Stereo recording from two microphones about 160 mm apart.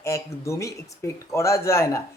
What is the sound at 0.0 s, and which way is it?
A man's voice, 20° left (ahead or behind).